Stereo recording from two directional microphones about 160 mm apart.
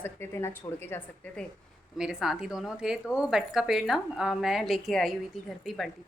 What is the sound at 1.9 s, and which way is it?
Speech, 5° right (ahead or behind).